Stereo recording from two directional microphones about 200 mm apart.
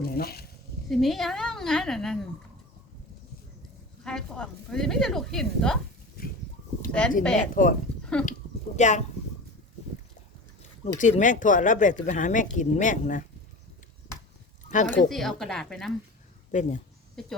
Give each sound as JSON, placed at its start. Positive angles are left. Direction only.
{"t": 0.0, "sound": "speech", "side_deg": 50}
{"t": 0.9, "sound": "a woman's voice", "side_deg": 0}
{"t": 4.0, "sound": "a woman's voice", "side_deg": 5}
{"t": 7.2, "sound": "a woman's voice", "side_deg": 5}
{"t": 7.5, "sound": "speech", "side_deg": 45}
{"t": 10.6, "sound": "speech", "side_deg": 35}
{"t": 14.7, "sound": "speech", "side_deg": 40}
{"t": 15.1, "sound": "a woman's voice", "side_deg": 0}
{"t": 16.5, "sound": "speech", "side_deg": 35}
{"t": 17.2, "sound": "a woman's voice", "side_deg": 0}